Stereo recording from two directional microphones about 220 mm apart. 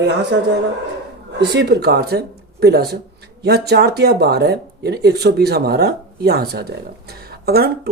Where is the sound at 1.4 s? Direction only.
50° right (ahead or behind).